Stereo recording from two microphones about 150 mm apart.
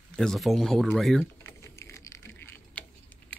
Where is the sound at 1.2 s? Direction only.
15° left (ahead or behind).